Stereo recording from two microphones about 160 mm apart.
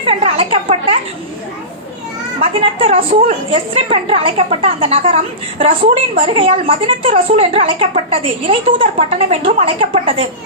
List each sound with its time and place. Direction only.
0.1 s a woman's voice: 35° right (ahead or behind)
2.4 s a woman's voice: 35° right (ahead or behind)